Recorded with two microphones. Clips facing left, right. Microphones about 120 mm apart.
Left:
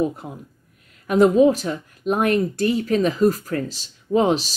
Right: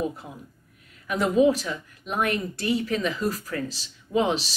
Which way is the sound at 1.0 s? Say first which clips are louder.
Left 6 dB; 40° left (ahead or behind).